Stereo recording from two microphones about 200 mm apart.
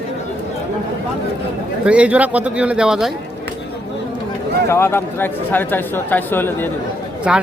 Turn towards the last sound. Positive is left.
turn(degrees=-5)  # may be behind; listen again after turning